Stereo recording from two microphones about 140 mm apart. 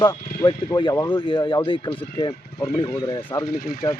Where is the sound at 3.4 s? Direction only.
90° left.